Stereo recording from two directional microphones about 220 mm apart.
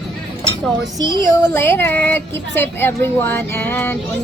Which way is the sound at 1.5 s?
10° left (ahead or behind).